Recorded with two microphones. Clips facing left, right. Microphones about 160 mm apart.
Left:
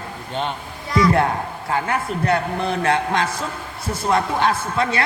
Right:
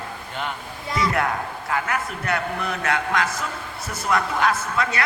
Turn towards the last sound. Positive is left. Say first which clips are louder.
# left 3 dB
turn(degrees=30)  # may be behind; listen again after turning